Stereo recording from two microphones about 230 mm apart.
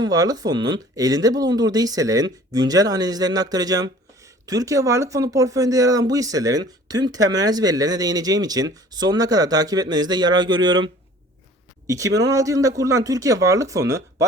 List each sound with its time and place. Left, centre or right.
0.0 s speech: centre